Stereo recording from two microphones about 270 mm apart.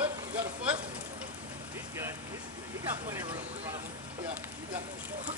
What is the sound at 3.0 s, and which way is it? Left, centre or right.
Speech, centre.